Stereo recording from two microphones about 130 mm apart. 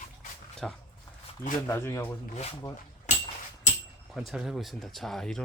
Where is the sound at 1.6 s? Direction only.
20° left (ahead or behind).